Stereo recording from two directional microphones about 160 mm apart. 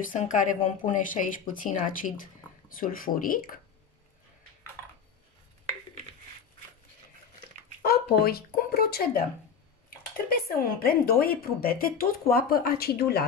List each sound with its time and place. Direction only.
0.1 s a woman's voice: 50° left (ahead or behind)
7.8 s speech: 70° left (ahead or behind)